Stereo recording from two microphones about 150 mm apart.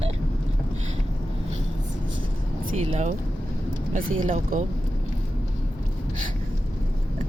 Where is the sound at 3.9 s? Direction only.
55° right (ahead or behind).